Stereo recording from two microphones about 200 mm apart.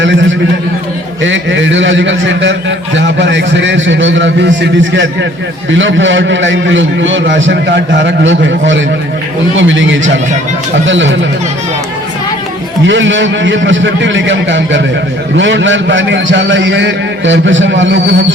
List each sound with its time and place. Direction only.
0.0 s a man's voice: 70° right (ahead or behind)
12.8 s a man's voice: 65° right (ahead or behind)